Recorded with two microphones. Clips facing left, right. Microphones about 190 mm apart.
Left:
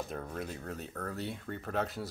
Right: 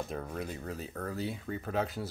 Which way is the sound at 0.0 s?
Centre (ahead or behind).